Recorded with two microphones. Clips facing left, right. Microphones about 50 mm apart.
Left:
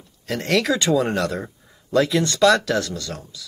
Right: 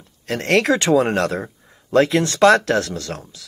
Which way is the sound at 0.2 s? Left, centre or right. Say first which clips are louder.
Right 3 dB; right.